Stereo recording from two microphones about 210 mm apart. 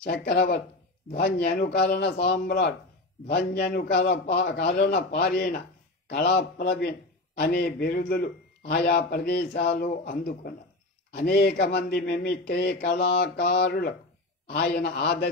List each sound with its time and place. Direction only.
0.0 s a man's voice: 50° left (ahead or behind)